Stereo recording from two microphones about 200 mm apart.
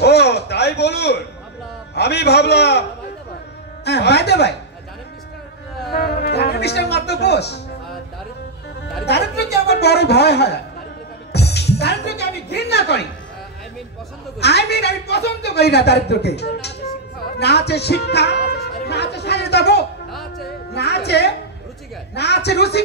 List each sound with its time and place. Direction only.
0.0 s a sound: 55° left (ahead or behind)
2.0 s speech: 55° left (ahead or behind)
3.8 s speech: 55° left (ahead or behind)
5.9 s speech: 50° left (ahead or behind)
9.0 s a woman's voice: 55° left (ahead or behind)
14.4 s speech: 55° left (ahead or behind)
20.1 s music: centre (ahead or behind)
20.7 s speech: 55° left (ahead or behind)